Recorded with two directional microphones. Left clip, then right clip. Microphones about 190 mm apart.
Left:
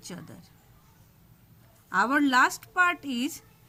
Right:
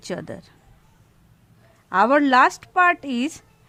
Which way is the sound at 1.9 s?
45° right (ahead or behind).